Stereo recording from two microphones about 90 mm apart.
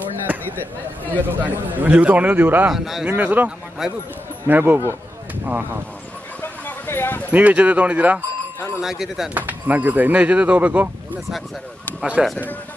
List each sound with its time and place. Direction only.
0.3 s a man's voice: 20° right (ahead or behind)
2.7 s speech: 5° right (ahead or behind)
3.1 s a man's voice: 20° right (ahead or behind)
3.8 s speech: centre (ahead or behind)
4.5 s speech: 25° right (ahead or behind)
6.4 s clip-clop: 25° left (ahead or behind)
7.2 s a man's voice: 15° right (ahead or behind)
8.8 s speech: 5° right (ahead or behind)
9.5 s a man's voice: 20° right (ahead or behind)
12.0 s speech: 5° right (ahead or behind)